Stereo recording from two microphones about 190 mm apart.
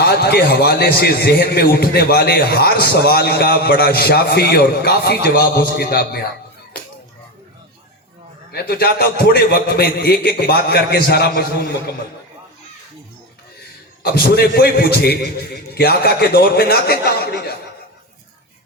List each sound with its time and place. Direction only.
0.2 s a man's voice: 55° left (ahead or behind)
8.5 s a man's voice: 55° left (ahead or behind)
14.0 s a man's voice: 55° left (ahead or behind)